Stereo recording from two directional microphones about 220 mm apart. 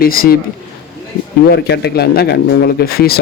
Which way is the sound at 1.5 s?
50° left (ahead or behind).